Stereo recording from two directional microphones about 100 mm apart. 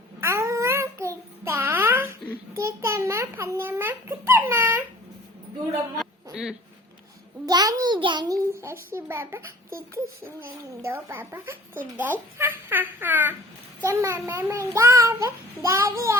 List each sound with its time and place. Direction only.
0.2 s child singing: 30° right (ahead or behind)
2.6 s a sound: 30° right (ahead or behind)
6.0 s a sound: 5° right (ahead or behind)
7.4 s a child's voice: 40° right (ahead or behind)
8.5 s speech: 25° right (ahead or behind)
13.8 s speech: 30° right (ahead or behind)